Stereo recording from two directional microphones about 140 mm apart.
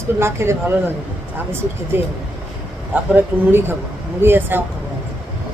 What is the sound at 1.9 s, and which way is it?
Speech, 15° right (ahead or behind).